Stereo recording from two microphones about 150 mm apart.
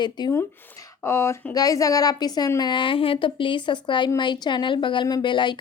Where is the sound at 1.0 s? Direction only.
15° left (ahead or behind).